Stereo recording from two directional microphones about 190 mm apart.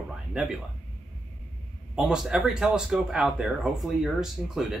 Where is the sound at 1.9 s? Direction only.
5° right (ahead or behind).